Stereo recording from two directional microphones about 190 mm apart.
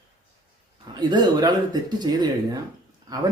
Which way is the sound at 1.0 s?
25° right (ahead or behind).